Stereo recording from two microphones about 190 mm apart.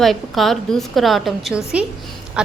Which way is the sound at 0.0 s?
Centre (ahead or behind).